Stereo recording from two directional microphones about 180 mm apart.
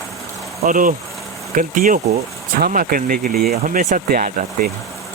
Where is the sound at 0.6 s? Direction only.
50° right (ahead or behind).